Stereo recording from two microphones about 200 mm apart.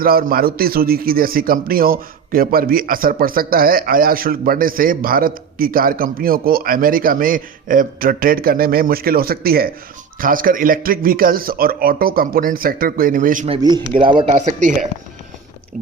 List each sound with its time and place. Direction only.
0.0 s a man's voice: 45° right (ahead or behind)
13.5 s speech: 20° right (ahead or behind)